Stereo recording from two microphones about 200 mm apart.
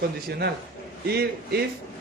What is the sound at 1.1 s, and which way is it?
Speech, 55° right (ahead or behind).